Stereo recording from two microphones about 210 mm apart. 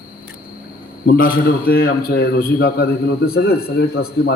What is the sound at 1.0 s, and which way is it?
A man's voice, 45° left (ahead or behind).